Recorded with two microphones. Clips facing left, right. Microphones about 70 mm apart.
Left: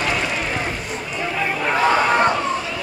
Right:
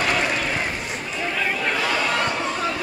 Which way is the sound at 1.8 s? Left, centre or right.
Left.